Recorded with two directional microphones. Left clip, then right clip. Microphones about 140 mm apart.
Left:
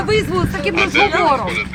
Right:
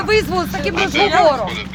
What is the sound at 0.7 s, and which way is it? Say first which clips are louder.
Speech: left 2 dB; 45° left (ahead or behind).